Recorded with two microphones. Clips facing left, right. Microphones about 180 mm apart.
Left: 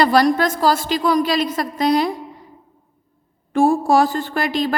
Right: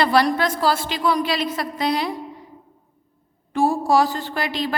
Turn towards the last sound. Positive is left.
turn(degrees=45)  # may be behind; listen again after turning